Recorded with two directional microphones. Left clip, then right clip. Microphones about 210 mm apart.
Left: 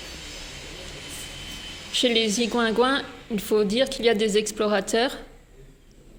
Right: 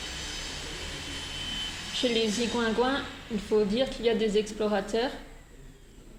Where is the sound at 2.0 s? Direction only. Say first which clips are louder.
Left 6 dB; 55° left (ahead or behind).